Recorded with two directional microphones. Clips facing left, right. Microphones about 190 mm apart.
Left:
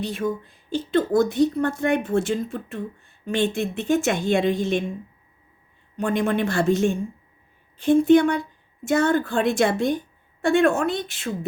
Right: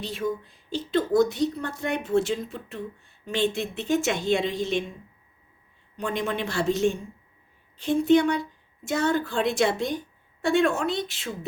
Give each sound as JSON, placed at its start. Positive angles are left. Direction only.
{"t": 0.0, "sound": "a woman's voice", "side_deg": 50}
{"t": 6.0, "sound": "a woman's voice", "side_deg": 50}